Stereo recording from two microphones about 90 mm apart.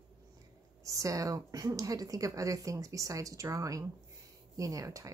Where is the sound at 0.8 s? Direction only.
40° right (ahead or behind).